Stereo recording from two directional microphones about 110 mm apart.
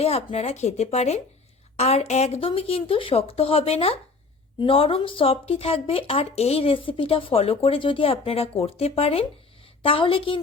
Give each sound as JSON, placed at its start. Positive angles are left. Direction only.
{"t": 0.0, "sound": "a woman's voice", "side_deg": 70}
{"t": 2.5, "sound": "speech", "side_deg": 60}
{"t": 9.8, "sound": "a woman's voice", "side_deg": 55}